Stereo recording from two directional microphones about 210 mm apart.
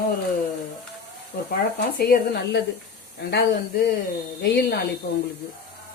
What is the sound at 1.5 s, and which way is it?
Speech, 45° left (ahead or behind).